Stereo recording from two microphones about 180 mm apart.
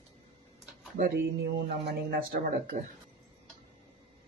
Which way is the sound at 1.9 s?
60° right (ahead or behind).